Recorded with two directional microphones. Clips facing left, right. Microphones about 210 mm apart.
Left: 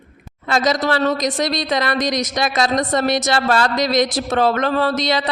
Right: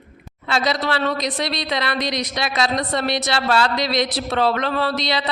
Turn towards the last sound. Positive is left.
turn(degrees=45)  # may be behind; listen again after turning